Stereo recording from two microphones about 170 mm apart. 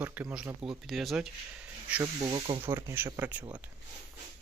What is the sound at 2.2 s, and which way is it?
Speech, 30° right (ahead or behind).